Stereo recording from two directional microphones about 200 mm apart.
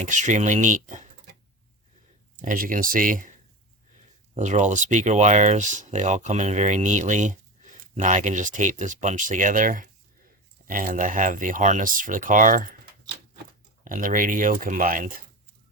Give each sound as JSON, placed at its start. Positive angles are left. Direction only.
{"t": 0.0, "sound": "speech", "side_deg": -40}
{"t": 2.4, "sound": "speech", "side_deg": -40}
{"t": 4.4, "sound": "speech", "side_deg": -35}
{"t": 13.8, "sound": "speech", "side_deg": -40}